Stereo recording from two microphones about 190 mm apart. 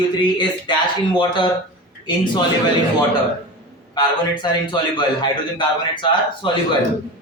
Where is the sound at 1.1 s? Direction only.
25° left (ahead or behind).